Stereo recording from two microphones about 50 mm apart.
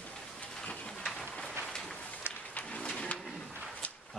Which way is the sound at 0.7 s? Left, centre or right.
Left.